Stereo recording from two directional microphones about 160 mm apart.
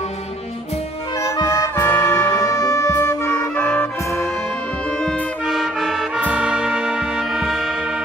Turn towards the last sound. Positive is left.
turn(degrees=-5)  # may be behind; listen again after turning